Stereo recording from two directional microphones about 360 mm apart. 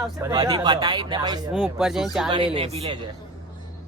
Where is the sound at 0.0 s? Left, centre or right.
Centre.